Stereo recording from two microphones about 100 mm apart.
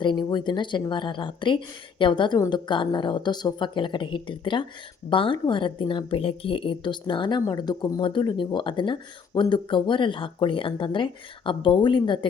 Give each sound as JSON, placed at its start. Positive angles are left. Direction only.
{"t": 0.0, "sound": "speech", "side_deg": 50}